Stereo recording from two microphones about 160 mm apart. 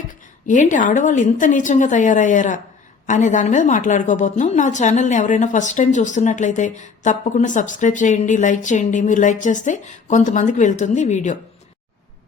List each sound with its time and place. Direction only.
0.4 s a woman's voice: 55° left (ahead or behind)